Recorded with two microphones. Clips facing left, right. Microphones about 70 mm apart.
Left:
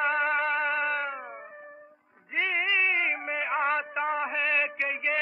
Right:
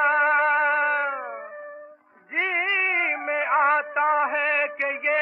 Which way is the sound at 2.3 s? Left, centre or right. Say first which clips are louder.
Right 3 dB; right.